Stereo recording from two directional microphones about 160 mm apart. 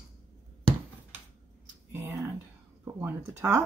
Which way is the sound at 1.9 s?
15° right (ahead or behind).